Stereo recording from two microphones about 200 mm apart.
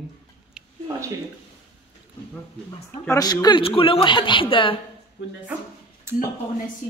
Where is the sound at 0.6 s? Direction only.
5° right (ahead or behind).